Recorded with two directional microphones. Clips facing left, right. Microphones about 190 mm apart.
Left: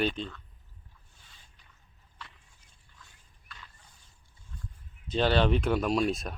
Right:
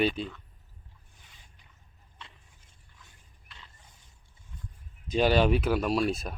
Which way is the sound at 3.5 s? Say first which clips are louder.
Left 2 dB; 25° right (ahead or behind).